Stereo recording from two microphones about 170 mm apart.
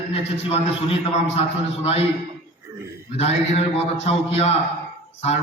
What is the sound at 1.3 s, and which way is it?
Speech, 35° left (ahead or behind).